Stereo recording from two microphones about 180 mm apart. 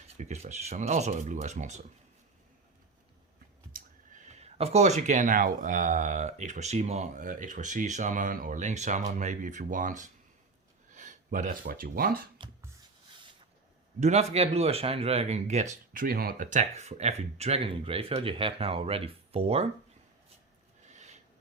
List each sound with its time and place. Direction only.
0.2 s speech: 40° right (ahead or behind)
3.7 s speech: 50° right (ahead or behind)
14.0 s speech: 40° right (ahead or behind)
15.9 s speech: 55° right (ahead or behind); by 19.6 s 35° right (ahead or behind)
20.9 s a sound: 40° right (ahead or behind)